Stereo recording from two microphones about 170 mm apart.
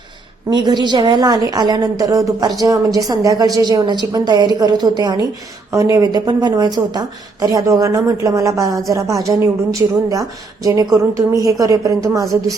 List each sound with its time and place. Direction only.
0.5 s a woman's voice: 25° right (ahead or behind)